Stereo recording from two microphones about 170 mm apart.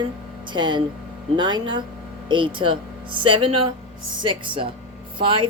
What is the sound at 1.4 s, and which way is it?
Speech, 25° right (ahead or behind).